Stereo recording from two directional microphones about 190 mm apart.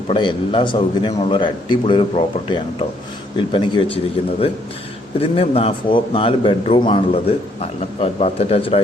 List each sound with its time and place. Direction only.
0.1 s a man's voice: 25° left (ahead or behind)